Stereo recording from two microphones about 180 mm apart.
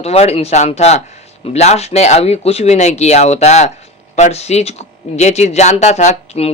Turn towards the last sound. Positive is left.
turn(degrees=35)  # may be behind; listen again after turning